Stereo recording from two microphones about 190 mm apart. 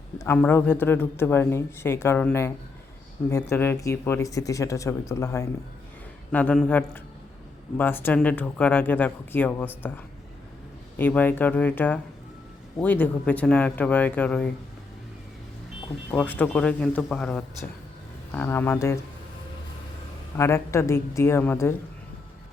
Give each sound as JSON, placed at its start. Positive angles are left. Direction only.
{"t": 0.2, "sound": "speech", "side_deg": 10}
{"t": 16.1, "sound": "speech", "side_deg": 10}
{"t": 20.3, "sound": "speech", "side_deg": 15}